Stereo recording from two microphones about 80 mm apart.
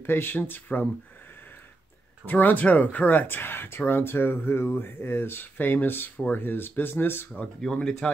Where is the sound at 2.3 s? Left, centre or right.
Left.